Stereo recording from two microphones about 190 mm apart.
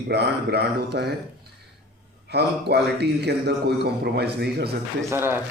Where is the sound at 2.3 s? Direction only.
60° right (ahead or behind).